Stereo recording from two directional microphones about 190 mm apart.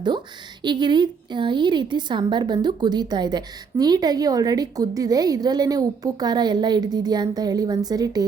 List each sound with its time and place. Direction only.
0.6 s a woman's voice: 25° right (ahead or behind)